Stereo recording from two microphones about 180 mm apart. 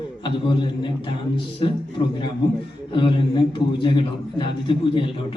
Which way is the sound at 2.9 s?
25° left (ahead or behind).